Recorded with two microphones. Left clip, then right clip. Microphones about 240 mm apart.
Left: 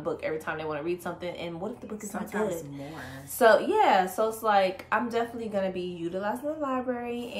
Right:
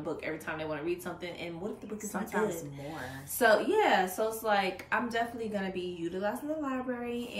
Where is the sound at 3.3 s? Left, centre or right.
Centre.